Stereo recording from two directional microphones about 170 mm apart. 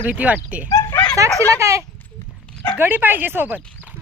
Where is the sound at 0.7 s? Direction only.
15° left (ahead or behind).